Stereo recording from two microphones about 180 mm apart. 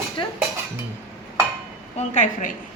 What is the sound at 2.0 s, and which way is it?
Speech, 40° left (ahead or behind).